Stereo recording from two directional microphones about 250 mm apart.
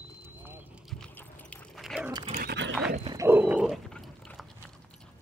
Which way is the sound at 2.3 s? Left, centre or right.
Right.